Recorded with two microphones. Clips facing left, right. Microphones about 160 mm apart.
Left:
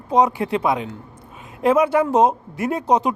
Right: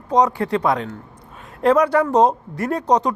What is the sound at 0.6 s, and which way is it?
Speech, 5° left (ahead or behind).